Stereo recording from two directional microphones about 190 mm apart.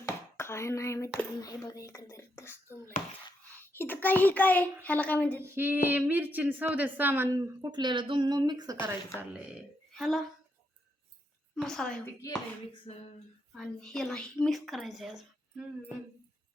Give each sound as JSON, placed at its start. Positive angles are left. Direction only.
{"t": 0.0, "sound": "a child's voice", "side_deg": 15}
{"t": 5.4, "sound": "speech", "side_deg": -10}
{"t": 9.4, "sound": "speech", "side_deg": 0}
{"t": 11.5, "sound": "a woman's voice", "side_deg": 5}
{"t": 12.8, "sound": "a sound", "side_deg": 30}
{"t": 13.5, "sound": "a woman's voice", "side_deg": 0}